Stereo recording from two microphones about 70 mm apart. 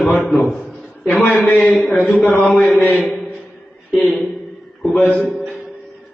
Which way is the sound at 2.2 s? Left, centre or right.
Left.